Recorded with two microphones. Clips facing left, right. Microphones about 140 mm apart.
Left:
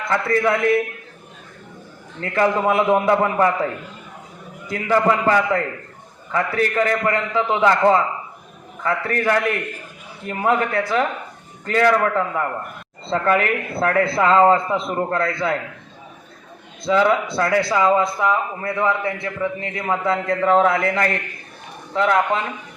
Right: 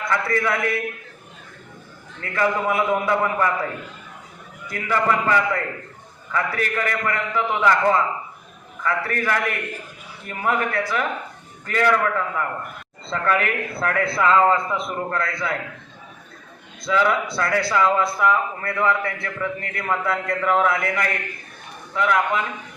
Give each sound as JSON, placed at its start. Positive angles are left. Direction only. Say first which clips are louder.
{"t": 0.1, "sound": "a man's voice", "louder": "left 4 dB", "side_deg": 25}
{"t": 2.2, "sound": "a man's voice", "louder": "left 4 dB", "side_deg": 25}
{"t": 4.7, "sound": "a man's voice", "louder": "left 4 dB", "side_deg": 20}
{"t": 16.8, "sound": "a man's voice", "louder": "left 3 dB", "side_deg": 25}